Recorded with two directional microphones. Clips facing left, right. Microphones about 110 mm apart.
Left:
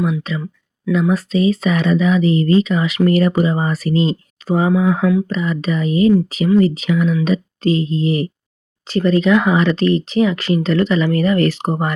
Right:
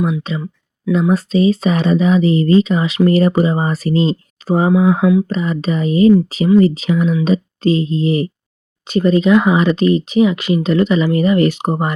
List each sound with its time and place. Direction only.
0.2 s speech: 25° right (ahead or behind)
4.7 s speech: 20° right (ahead or behind)
5.3 s speech: 30° right (ahead or behind)